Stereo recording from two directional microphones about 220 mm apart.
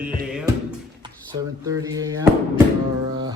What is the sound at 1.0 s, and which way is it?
Speech, 15° right (ahead or behind).